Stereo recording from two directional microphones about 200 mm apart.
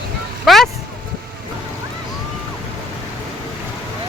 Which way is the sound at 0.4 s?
Centre (ahead or behind).